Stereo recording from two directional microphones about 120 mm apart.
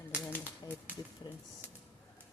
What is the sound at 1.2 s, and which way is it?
Speech, 35° left (ahead or behind).